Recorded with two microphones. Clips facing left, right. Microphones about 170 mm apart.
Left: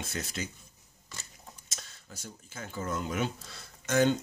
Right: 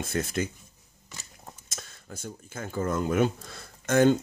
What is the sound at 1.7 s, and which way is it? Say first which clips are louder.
Speech: right 8 dB; 50° right (ahead or behind).